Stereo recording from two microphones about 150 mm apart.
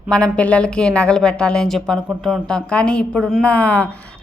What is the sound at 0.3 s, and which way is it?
A woman's voice, 10° left (ahead or behind).